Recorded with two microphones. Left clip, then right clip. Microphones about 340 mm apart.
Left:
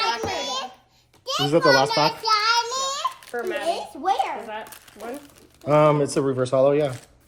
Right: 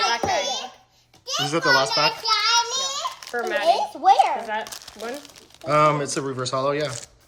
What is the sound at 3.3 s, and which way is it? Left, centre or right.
Speech, right.